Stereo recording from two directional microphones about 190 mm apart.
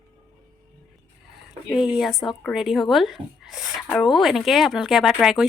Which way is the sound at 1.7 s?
5° right (ahead or behind).